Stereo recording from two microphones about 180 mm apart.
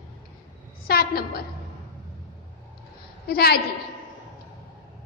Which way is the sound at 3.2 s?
60° left (ahead or behind).